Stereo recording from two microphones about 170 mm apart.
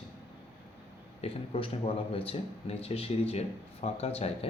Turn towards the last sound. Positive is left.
turn(degrees=35)  # may be behind; listen again after turning